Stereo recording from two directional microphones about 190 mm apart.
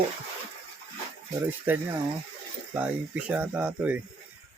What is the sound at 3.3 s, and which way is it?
Speech, 10° right (ahead or behind).